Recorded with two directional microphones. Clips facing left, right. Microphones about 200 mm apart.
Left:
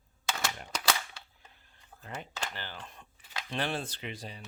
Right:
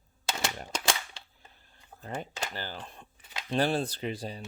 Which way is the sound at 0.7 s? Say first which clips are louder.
Even; 25° right (ahead or behind).